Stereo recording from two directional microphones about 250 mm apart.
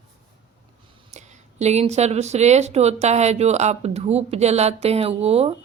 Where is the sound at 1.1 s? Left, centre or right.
Right.